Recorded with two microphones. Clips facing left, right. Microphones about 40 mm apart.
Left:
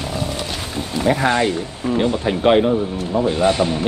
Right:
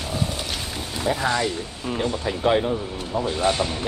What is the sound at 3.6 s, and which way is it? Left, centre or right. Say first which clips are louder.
Speech: left 7 dB; left.